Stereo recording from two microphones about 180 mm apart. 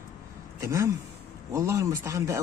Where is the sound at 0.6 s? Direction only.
15° right (ahead or behind).